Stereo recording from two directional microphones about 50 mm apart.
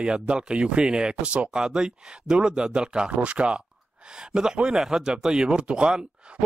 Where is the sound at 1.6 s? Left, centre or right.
Centre.